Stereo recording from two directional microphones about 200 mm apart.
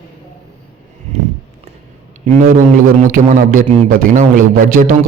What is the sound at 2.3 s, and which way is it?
A man's voice, 40° right (ahead or behind).